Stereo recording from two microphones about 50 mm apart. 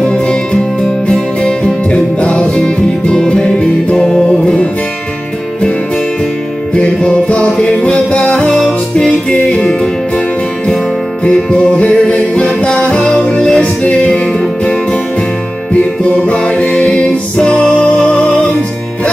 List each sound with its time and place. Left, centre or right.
0.1 s music: centre
2.6 s music: centre
6.7 s music: left
8.5 s music: centre
11.2 s music: left
16.3 s music: left